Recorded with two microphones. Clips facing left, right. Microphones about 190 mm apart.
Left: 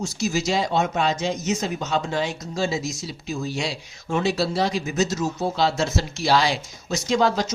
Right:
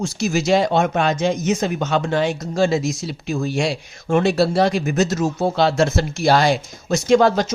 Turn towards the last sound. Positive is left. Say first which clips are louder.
# right 6 dB
turn(degrees=-55)  # may be behind; listen again after turning